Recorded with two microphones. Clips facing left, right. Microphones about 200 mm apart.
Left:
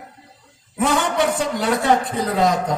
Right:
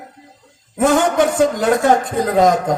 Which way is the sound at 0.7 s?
45° right (ahead or behind).